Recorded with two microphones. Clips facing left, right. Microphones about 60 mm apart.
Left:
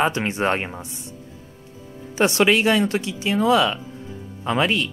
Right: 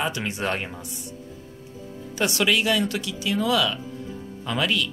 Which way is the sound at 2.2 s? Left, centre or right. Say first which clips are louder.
Left 5 dB; left.